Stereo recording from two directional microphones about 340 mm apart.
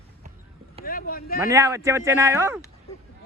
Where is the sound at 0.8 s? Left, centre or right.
Left.